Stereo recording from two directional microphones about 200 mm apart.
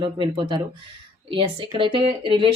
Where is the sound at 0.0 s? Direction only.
20° right (ahead or behind).